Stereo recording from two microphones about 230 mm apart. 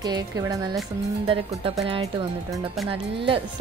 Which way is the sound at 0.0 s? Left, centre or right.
Centre.